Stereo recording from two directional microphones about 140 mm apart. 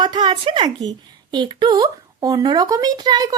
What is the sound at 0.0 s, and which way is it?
A woman's voice, 35° right (ahead or behind).